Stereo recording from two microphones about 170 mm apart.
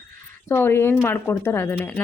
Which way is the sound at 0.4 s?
15° left (ahead or behind).